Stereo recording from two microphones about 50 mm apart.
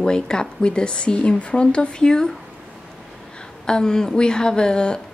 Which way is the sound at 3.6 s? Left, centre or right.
Centre.